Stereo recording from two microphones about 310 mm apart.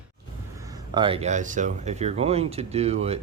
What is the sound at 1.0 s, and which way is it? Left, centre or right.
Speech, centre.